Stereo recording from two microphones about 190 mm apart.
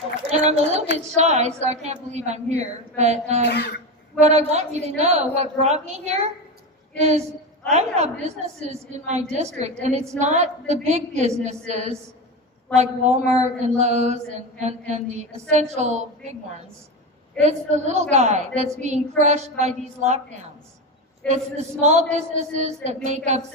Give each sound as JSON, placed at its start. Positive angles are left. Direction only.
{"t": 0.3, "sound": "speech", "side_deg": -35}
{"t": 3.4, "sound": "speech", "side_deg": 60}
{"t": 4.2, "sound": "speech", "side_deg": -35}
{"t": 7.7, "sound": "speech", "side_deg": -35}
{"t": 17.4, "sound": "speech", "side_deg": -40}
{"t": 21.8, "sound": "speech", "side_deg": -35}